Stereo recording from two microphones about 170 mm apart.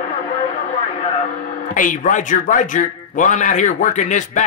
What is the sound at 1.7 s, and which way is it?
A man's voice, 50° left (ahead or behind).